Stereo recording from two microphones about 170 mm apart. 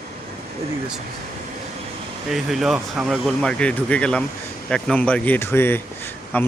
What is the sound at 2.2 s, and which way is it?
Speech, centre (ahead or behind).